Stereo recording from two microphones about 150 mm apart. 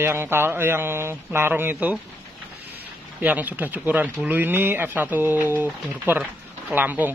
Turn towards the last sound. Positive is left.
turn(degrees=-10)  # may be behind; listen again after turning